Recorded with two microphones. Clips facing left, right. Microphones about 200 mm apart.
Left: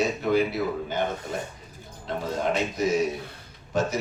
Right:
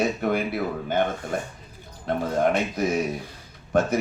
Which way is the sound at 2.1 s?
55° right (ahead or behind).